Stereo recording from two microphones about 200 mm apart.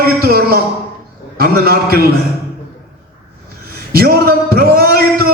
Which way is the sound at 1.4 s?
50° right (ahead or behind).